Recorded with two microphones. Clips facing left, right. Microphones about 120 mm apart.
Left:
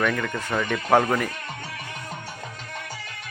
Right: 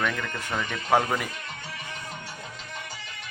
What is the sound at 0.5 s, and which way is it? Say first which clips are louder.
Speech: left 4 dB; 45° left (ahead or behind).